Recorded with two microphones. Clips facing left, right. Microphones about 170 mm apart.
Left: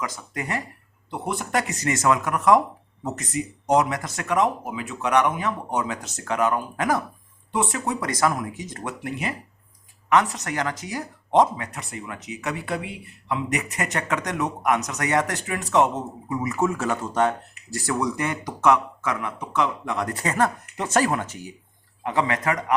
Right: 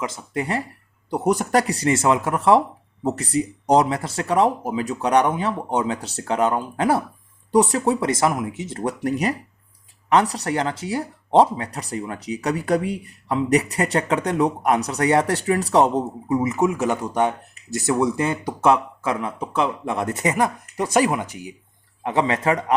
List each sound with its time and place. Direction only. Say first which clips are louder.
0.0 s speech: right 5 dB; 25° right (ahead or behind)
1.1 s speech: right 7 dB; 40° right (ahead or behind); by 21.5 s 15° right (ahead or behind)
22.0 s speech: right 3 dB; 25° right (ahead or behind)